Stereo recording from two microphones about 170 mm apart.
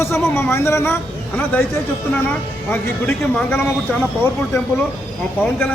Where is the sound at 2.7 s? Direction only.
10° left (ahead or behind).